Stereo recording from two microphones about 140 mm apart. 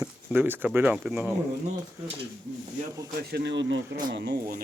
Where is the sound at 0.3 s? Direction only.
15° right (ahead or behind).